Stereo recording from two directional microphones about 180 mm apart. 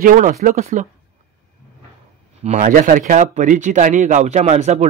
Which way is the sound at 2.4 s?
45° right (ahead or behind).